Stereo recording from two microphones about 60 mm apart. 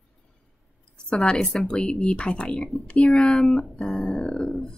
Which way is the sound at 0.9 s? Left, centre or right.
Centre.